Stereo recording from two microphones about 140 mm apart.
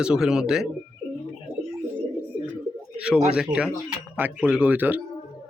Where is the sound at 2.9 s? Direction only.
5° right (ahead or behind).